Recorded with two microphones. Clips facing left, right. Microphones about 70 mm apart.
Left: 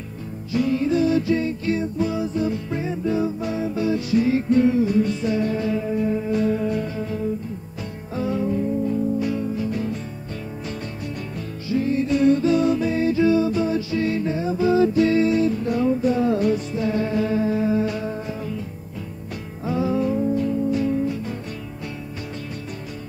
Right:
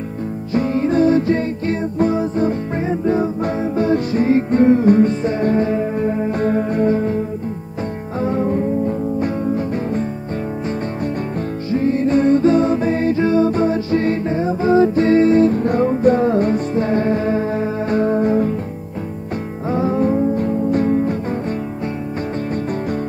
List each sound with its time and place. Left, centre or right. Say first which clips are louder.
0.6 s music: right 4 dB; right
8.2 s music: right 4 dB; right
11.7 s music: right 5 dB; right
19.7 s music: right 4 dB; right